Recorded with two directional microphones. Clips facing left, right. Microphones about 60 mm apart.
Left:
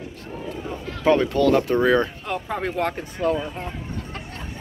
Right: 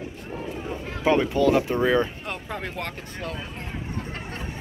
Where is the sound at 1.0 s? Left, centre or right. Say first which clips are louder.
Left 2 dB; centre.